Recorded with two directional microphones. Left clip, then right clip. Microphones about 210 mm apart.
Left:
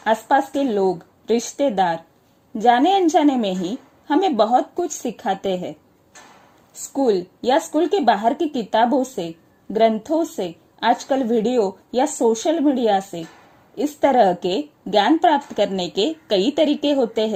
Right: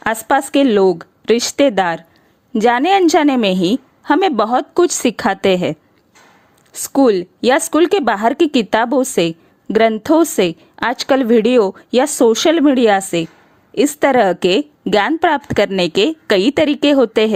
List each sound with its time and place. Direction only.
0.0 s a woman's voice: 30° right (ahead or behind)
6.9 s a woman's voice: 35° right (ahead or behind)